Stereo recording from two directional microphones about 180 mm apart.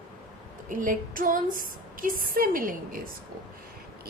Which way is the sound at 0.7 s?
50° right (ahead or behind).